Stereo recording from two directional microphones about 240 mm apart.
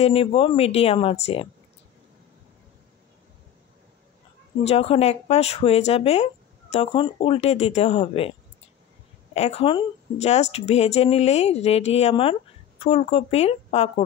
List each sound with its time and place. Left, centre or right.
0.0 s speech: left
4.6 s speech: left
9.3 s speech: left